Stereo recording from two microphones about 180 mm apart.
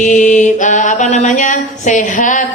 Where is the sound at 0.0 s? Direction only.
45° left (ahead or behind).